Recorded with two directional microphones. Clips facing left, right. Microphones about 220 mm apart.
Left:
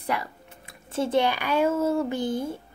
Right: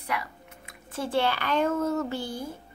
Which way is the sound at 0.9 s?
20° left (ahead or behind).